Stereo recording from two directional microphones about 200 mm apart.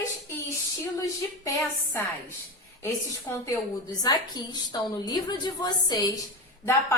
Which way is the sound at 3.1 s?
15° left (ahead or behind).